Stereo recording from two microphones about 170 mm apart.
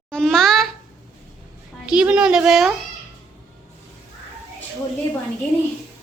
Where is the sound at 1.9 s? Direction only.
5° right (ahead or behind).